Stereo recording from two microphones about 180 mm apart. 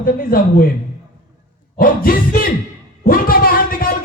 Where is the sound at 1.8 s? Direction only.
55° left (ahead or behind).